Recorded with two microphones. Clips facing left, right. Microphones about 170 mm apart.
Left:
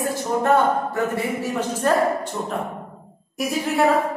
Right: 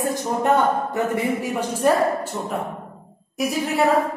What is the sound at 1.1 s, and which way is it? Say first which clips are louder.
A woman's voice: right 1 dB; 15° right (ahead or behind).